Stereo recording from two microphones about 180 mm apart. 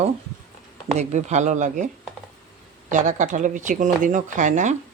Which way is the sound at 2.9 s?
45° right (ahead or behind).